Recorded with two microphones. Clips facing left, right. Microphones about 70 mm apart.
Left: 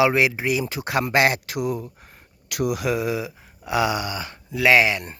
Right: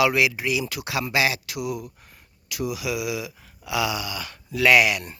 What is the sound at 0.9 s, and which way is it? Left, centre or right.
Speech, left.